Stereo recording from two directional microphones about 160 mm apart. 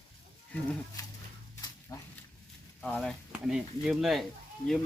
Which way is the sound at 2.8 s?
5° left (ahead or behind).